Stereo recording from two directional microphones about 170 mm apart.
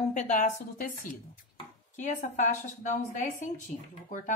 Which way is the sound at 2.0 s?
45° left (ahead or behind).